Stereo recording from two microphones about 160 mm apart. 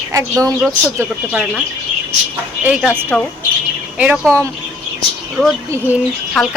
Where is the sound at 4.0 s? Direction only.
10° right (ahead or behind).